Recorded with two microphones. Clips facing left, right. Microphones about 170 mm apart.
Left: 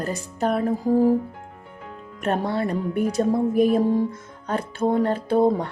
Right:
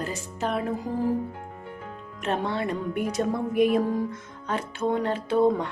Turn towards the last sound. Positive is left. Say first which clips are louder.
# left 2 dB
turn(degrees=40)  # may be behind; listen again after turning